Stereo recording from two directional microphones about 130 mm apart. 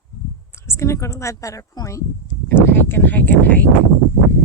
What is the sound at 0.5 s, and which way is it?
Speech, 20° left (ahead or behind).